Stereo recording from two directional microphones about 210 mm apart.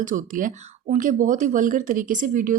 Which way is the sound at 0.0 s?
40° right (ahead or behind).